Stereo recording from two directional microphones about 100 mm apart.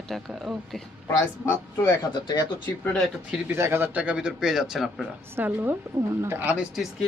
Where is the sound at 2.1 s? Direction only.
45° left (ahead or behind).